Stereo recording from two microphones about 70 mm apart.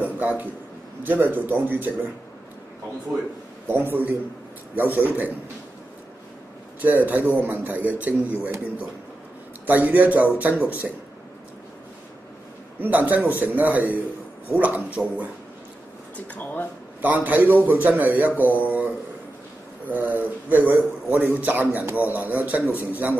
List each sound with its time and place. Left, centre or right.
0.0 s a sound: right
1.0 s a man's voice: right
3.6 s a man's voice: right
6.8 s a man's voice: right
9.7 s a man's voice: right
12.8 s a man's voice: right
17.0 s a man's voice: right